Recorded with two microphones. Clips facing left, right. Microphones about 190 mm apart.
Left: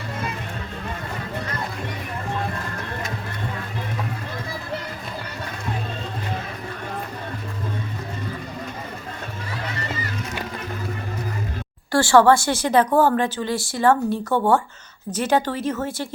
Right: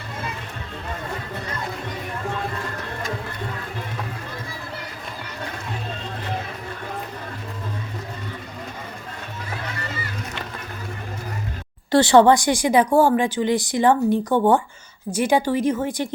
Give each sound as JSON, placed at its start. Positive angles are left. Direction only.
{"t": 11.9, "sound": "speech", "side_deg": -20}